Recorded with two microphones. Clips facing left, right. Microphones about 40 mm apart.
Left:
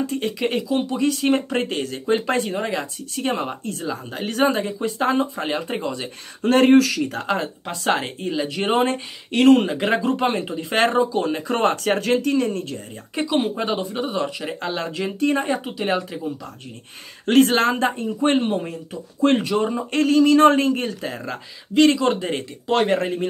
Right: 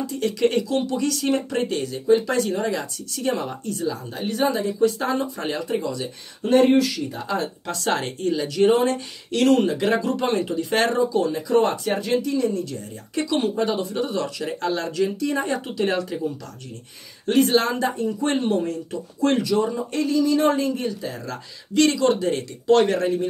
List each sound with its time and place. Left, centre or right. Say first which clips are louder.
0.2 s speech: right 2 dB; left
4.2 s speech: left 2 dB; left
6.4 s speech: left 2 dB; left
7.6 s speech: left 2 dB; left
13.1 s speech: left 1 dB; left
15.4 s speech: even; centre
17.3 s speech: left 3 dB; left
19.2 s speech: left 2 dB; left
21.3 s speech: left 1 dB; left